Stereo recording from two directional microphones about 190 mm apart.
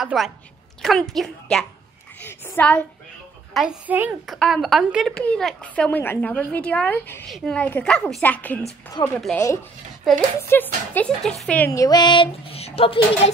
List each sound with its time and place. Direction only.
0.0 s a woman's voice: centre (ahead or behind)
3.5 s a woman's voice: 5° right (ahead or behind); by 13.3 s 30° left (ahead or behind)